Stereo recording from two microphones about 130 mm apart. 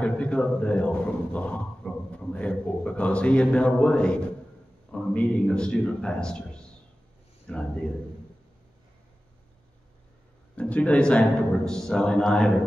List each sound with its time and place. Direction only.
0.0 s a man's voice: 10° left (ahead or behind)
10.5 s a man's voice: 10° left (ahead or behind)